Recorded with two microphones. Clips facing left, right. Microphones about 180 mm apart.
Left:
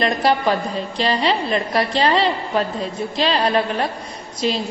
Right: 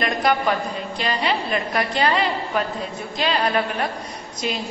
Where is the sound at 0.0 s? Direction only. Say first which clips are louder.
Left 3 dB; 30° left (ahead or behind).